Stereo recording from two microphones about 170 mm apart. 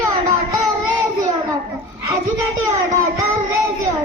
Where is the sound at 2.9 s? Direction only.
20° right (ahead or behind).